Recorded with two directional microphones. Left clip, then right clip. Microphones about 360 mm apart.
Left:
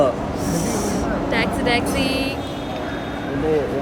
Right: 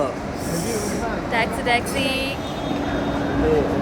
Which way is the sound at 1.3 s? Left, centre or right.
Centre.